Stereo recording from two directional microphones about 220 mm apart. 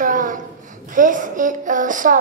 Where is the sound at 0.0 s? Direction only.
35° right (ahead or behind).